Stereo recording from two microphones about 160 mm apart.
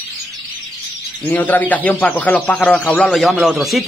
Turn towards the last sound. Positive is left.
turn(degrees=0)  # may be behind; listen again after turning